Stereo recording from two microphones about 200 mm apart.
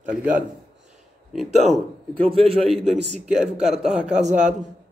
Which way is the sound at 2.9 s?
30° right (ahead or behind).